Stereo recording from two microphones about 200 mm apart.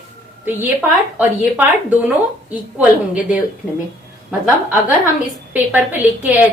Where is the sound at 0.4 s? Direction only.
10° right (ahead or behind).